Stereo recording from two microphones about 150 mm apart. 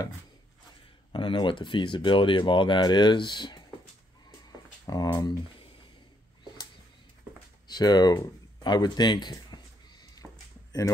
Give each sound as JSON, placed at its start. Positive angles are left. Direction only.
{"t": 1.1, "sound": "speech", "side_deg": 30}
{"t": 4.8, "sound": "speech", "side_deg": 25}
{"t": 7.6, "sound": "speech", "side_deg": 30}
{"t": 8.6, "sound": "a sound", "side_deg": 30}